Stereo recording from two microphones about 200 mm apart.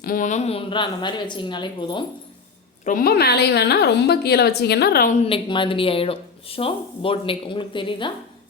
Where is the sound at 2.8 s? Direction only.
45° left (ahead or behind).